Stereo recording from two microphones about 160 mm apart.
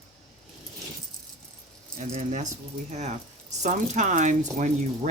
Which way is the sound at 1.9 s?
50° right (ahead or behind).